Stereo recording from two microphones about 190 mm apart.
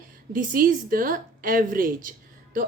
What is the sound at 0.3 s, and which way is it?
A woman's voice, 45° right (ahead or behind).